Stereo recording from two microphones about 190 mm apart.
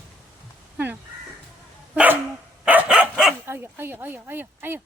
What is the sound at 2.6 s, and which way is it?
Dog, 5° right (ahead or behind).